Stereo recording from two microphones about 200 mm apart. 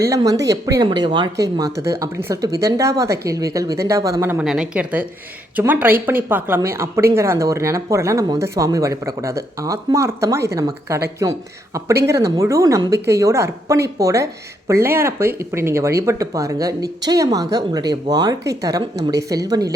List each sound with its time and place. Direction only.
0.1 s speech: 15° right (ahead or behind)